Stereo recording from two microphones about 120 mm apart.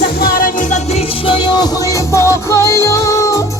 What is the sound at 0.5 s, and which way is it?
Music, 85° left.